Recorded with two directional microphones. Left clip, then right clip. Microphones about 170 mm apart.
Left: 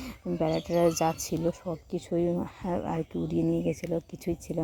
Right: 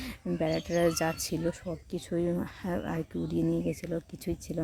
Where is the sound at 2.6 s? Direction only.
10° right (ahead or behind).